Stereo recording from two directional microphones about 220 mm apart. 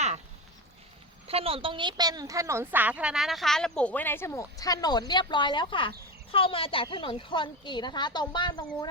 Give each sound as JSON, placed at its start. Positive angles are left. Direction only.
{"t": 1.3, "sound": "a woman's voice", "side_deg": -25}